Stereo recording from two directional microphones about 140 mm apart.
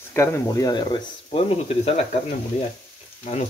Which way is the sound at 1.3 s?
45° left (ahead or behind).